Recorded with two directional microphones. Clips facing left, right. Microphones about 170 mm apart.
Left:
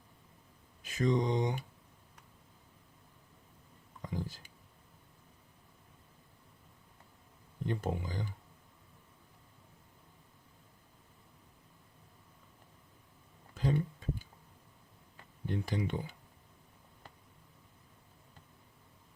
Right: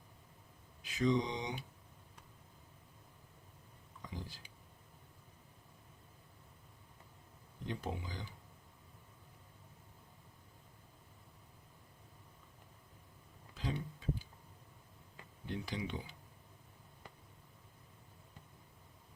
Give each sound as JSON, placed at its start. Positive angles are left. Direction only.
{"t": 0.8, "sound": "speech", "side_deg": 45}
{"t": 4.0, "sound": "whispering", "side_deg": 45}
{"t": 7.7, "sound": "speech", "side_deg": 50}
{"t": 13.5, "sound": "a sound", "side_deg": 45}
{"t": 15.4, "sound": "speech", "side_deg": 45}